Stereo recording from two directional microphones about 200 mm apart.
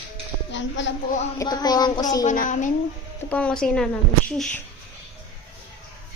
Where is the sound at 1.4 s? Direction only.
20° left (ahead or behind).